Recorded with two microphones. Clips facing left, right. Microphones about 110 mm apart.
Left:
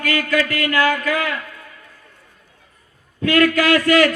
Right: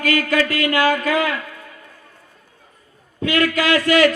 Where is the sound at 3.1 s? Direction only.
25° right (ahead or behind).